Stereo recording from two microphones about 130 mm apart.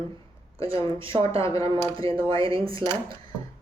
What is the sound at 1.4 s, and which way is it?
Speech, 25° left (ahead or behind).